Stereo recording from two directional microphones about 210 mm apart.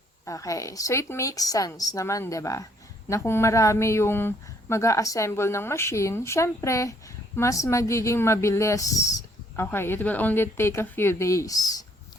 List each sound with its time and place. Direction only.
0.3 s a woman's voice: 15° left (ahead or behind)